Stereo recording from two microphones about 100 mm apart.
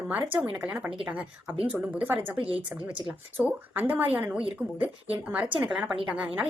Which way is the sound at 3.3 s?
15° right (ahead or behind).